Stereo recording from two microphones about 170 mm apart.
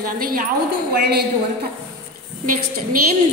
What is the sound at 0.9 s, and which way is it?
Speech, 70° right (ahead or behind).